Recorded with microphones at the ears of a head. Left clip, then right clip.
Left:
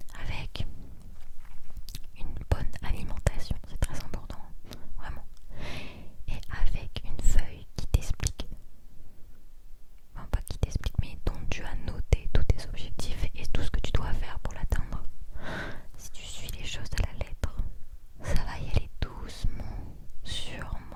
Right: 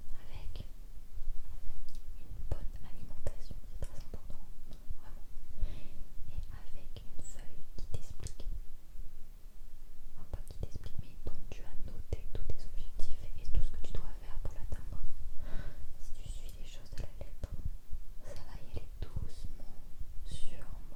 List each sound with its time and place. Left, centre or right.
0.0 s whispering: left
10.2 s whispering: left